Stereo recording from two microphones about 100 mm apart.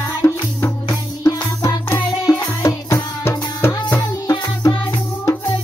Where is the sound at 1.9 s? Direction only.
25° left (ahead or behind).